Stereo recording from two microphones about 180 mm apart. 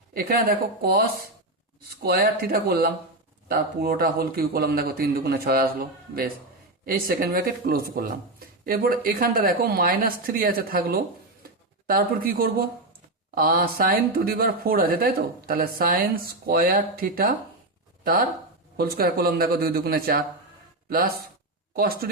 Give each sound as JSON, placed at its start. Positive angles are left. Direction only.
{"t": 0.1, "sound": "speech", "side_deg": -55}
{"t": 21.8, "sound": "speech", "side_deg": -55}